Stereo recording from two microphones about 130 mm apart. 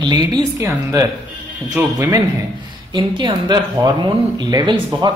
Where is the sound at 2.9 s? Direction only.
35° right (ahead or behind).